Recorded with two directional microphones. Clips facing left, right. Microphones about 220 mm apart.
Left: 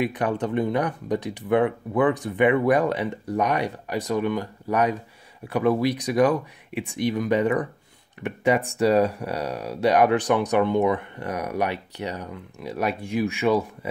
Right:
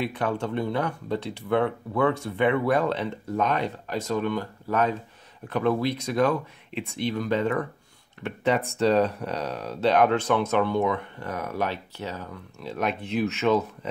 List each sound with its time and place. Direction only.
0.0 s speech: 15° left (ahead or behind)